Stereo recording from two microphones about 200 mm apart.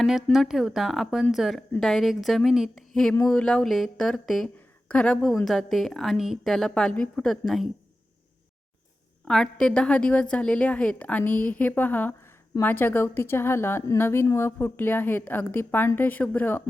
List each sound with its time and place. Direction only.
0.3 s a woman's voice: centre (ahead or behind)
9.2 s a woman's voice: 5° left (ahead or behind)